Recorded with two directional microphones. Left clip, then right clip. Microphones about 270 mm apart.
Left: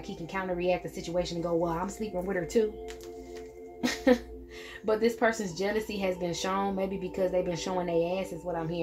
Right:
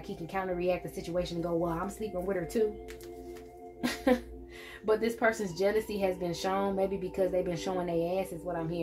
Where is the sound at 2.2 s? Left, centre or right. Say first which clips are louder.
Left 5 dB; left.